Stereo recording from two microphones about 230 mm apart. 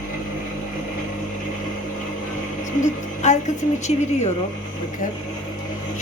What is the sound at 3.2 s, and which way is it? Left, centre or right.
Speech, left.